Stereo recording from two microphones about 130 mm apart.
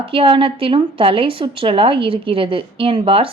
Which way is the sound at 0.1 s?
45° right (ahead or behind).